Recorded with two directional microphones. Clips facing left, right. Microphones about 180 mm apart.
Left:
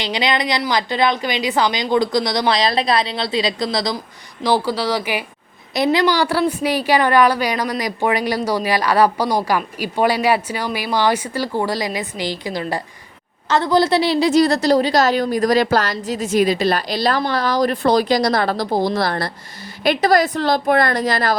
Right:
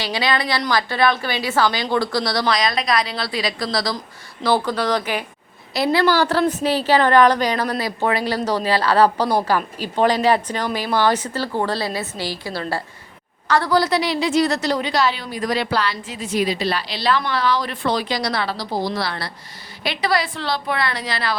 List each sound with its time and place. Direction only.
0.0 s a woman's voice: 20° left (ahead or behind)
4.4 s a woman's voice: 10° left (ahead or behind); by 21.3 s 45° left (ahead or behind)